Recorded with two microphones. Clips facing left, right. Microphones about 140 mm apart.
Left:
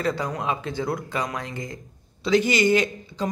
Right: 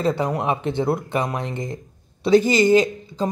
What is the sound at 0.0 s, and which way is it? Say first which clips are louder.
Speech: right 5 dB; 25° right (ahead or behind).